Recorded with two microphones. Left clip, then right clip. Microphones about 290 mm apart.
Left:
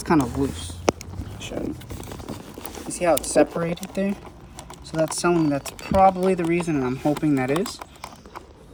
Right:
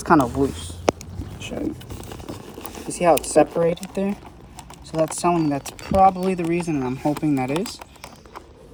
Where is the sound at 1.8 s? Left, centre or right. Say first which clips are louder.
Even; centre.